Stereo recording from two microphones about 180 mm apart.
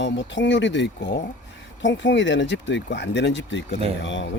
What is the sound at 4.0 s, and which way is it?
Speech, 90° left.